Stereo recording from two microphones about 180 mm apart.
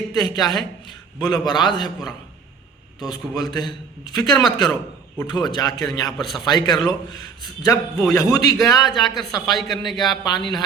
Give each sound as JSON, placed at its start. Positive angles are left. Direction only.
{"t": 0.3, "sound": "a man's voice", "side_deg": 20}
{"t": 6.1, "sound": "a man's voice", "side_deg": 0}
{"t": 6.4, "sound": "a man's voice", "side_deg": 25}
{"t": 9.5, "sound": "a man's voice", "side_deg": 0}
{"t": 10.1, "sound": "a man's voice", "side_deg": 25}